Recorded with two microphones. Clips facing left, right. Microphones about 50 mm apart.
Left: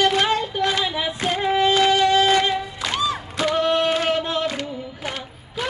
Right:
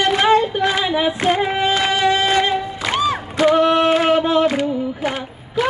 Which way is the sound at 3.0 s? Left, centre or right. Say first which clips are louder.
Right 8 dB; right.